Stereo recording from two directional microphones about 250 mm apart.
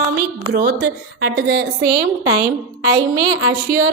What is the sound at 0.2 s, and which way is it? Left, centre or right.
A woman's voice, right.